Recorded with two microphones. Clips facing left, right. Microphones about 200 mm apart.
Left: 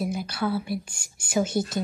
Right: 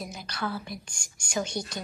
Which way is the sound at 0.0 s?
5° left (ahead or behind).